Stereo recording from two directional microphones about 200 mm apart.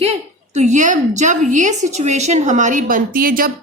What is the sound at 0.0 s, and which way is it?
A woman's voice, 35° right (ahead or behind).